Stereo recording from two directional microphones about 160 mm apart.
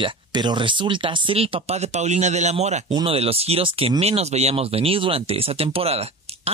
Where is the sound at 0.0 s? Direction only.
25° right (ahead or behind); by 2.8 s 45° right (ahead or behind).